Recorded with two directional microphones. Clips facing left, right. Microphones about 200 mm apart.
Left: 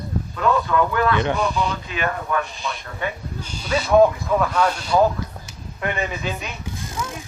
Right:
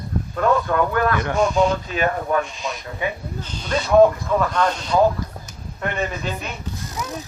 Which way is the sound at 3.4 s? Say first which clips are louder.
Left 1 dB; 10° left (ahead or behind).